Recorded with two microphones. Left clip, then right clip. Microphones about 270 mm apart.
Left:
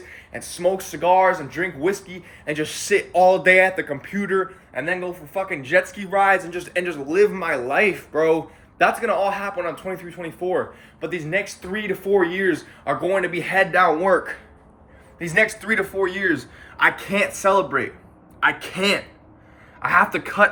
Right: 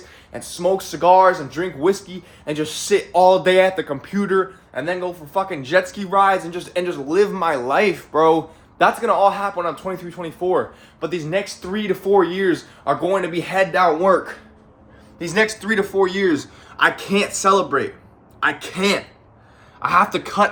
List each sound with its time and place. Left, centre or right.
0.3 s speech: centre
15.2 s speech: centre